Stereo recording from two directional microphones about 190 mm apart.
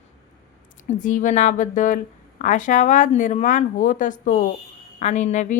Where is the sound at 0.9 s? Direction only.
40° left (ahead or behind).